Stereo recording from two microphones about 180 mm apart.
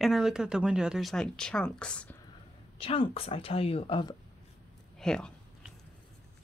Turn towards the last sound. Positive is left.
turn(degrees=5)  # may be behind; listen again after turning